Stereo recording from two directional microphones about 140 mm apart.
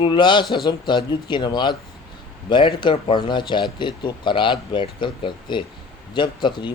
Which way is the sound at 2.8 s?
35° left (ahead or behind).